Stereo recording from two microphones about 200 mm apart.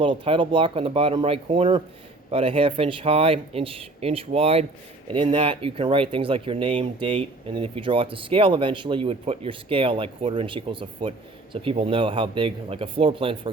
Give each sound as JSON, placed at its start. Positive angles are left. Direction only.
{"t": 0.0, "sound": "speech", "side_deg": -25}